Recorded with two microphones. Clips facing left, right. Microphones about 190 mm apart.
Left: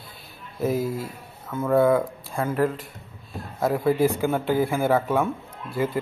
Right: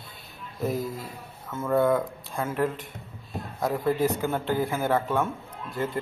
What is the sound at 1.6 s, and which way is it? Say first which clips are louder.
A man's voice: left 4 dB; 5° left (ahead or behind).